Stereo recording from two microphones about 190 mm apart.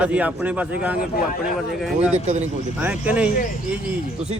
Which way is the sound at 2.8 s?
10° right (ahead or behind).